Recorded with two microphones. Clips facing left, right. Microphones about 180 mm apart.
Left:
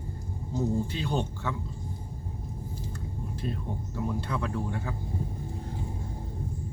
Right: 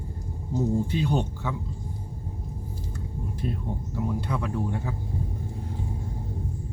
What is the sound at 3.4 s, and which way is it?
Speech, 10° right (ahead or behind).